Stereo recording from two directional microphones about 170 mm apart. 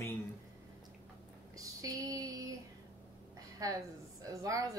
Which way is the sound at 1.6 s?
20° right (ahead or behind).